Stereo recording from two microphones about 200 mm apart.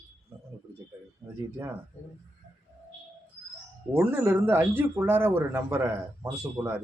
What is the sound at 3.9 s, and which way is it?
Speech, 10° right (ahead or behind).